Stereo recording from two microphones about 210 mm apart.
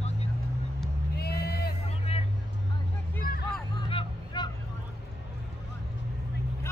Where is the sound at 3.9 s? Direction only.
25° left (ahead or behind).